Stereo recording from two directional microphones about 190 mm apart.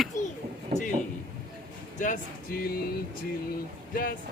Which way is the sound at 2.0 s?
45° left (ahead or behind).